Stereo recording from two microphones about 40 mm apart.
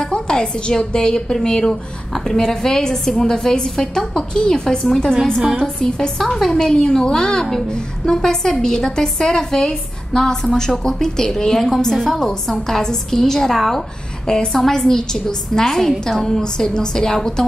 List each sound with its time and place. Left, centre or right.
0.0 s a woman's voice: centre